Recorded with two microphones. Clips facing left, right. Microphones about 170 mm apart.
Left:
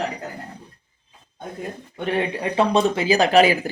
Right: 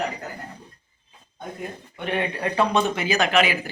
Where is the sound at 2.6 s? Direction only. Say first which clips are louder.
Left 4 dB; 30° left (ahead or behind).